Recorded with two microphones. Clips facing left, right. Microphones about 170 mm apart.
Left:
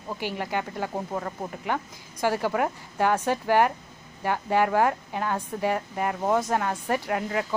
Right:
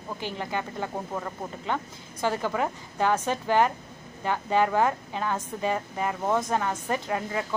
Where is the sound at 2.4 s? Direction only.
10° left (ahead or behind).